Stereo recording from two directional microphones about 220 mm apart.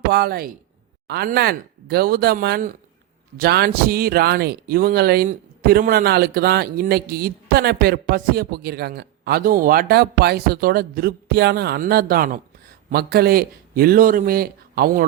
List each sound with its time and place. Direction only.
0.1 s speech: 45° right (ahead or behind)